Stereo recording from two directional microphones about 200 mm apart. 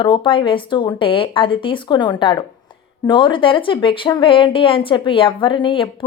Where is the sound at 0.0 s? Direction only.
25° left (ahead or behind).